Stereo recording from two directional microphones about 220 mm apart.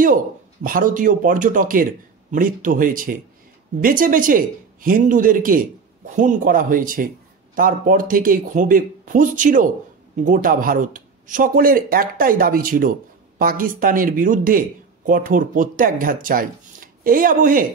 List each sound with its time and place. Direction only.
0.7 s speech: 40° right (ahead or behind)